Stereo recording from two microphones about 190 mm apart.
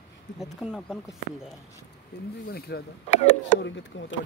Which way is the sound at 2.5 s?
55° left (ahead or behind).